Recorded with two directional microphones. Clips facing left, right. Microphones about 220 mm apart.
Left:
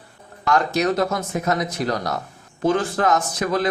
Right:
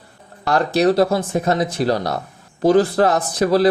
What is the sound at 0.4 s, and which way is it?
A man's voice, 35° right (ahead or behind).